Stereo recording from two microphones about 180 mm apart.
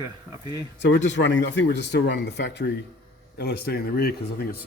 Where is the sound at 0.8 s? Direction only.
85° left.